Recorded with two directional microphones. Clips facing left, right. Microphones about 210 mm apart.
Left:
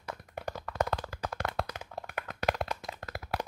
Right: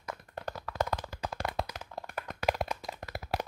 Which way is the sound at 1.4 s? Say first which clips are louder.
Even; 15° right (ahead or behind).